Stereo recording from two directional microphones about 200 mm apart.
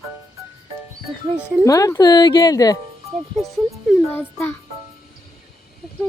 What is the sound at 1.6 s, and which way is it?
Speech, 15° left (ahead or behind).